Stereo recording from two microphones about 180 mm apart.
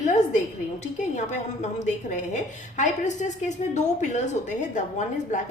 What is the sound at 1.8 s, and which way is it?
A woman's voice, 40° left (ahead or behind).